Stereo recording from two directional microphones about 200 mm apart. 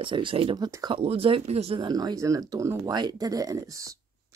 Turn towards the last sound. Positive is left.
turn(degrees=-20)  # may be behind; listen again after turning